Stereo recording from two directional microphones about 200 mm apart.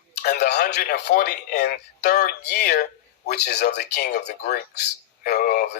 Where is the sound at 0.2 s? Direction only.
55° left (ahead or behind).